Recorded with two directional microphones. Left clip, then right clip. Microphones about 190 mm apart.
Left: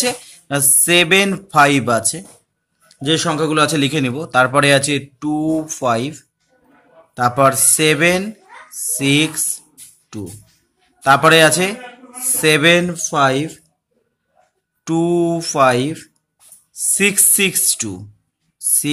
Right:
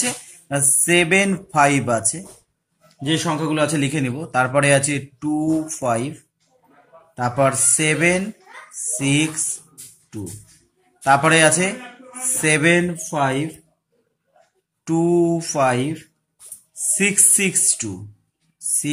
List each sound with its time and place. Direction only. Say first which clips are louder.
0.0 s a man's voice: left 6 dB; 30° left (ahead or behind)
3.1 s a man's voice: left 5 dB; 40° left (ahead or behind)
7.2 s a man's voice: left 5 dB; 35° left (ahead or behind)
8.6 s a sound: left 2 dB; 50° left (ahead or behind)
8.9 s a man's voice: left 5 dB; 30° left (ahead or behind)
11.0 s a man's voice: left 4 dB; 35° left (ahead or behind)
14.9 s a man's voice: left 1 dB; 30° left (ahead or behind)